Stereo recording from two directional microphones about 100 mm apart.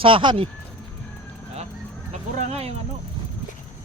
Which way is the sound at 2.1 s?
90° right.